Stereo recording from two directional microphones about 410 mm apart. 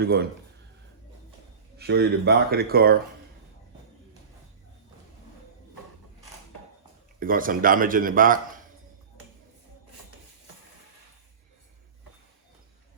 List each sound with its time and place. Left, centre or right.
0.0 s speech: right
1.8 s speech: right
7.2 s speech: centre